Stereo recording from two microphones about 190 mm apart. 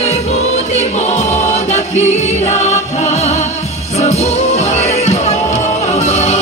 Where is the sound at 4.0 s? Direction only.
35° left (ahead or behind).